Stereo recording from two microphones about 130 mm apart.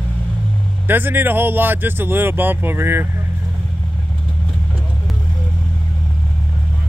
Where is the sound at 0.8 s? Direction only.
15° right (ahead or behind).